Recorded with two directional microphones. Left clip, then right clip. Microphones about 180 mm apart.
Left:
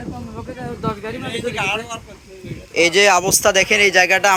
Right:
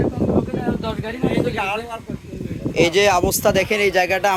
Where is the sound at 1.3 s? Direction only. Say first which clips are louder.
Left 1 dB; 45° right (ahead or behind).